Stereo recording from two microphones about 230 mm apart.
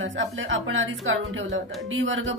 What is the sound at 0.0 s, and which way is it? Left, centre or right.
A woman's voice, right.